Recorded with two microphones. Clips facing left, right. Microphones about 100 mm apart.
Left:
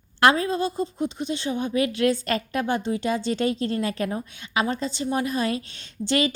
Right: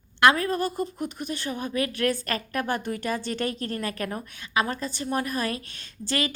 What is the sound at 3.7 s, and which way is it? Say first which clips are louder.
A woman's voice: left 4 dB; 25° left (ahead or behind).